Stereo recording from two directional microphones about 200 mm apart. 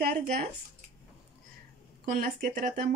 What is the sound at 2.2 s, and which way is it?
Speech, 45° right (ahead or behind).